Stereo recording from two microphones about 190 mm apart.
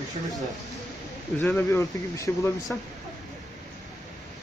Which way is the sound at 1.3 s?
10° left (ahead or behind).